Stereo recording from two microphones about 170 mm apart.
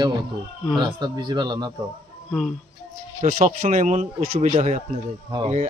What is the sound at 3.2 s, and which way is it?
Speech, 45° right (ahead or behind).